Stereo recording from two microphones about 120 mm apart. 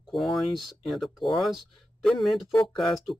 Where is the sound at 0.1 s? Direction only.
Centre (ahead or behind).